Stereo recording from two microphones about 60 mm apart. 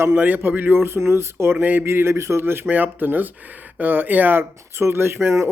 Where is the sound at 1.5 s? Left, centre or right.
Right.